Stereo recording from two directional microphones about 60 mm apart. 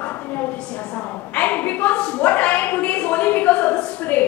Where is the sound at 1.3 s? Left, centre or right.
Left.